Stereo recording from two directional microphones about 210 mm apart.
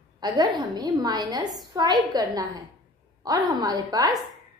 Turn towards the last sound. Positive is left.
turn(degrees=-20)  # may be behind; listen again after turning